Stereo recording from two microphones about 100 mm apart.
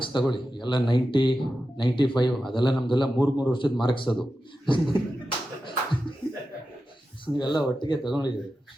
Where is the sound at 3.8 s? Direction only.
55° left (ahead or behind).